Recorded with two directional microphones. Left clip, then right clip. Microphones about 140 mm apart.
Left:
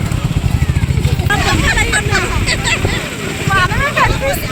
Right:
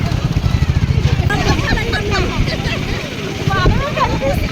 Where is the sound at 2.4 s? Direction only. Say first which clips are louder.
Left 6 dB; 40° right (ahead or behind).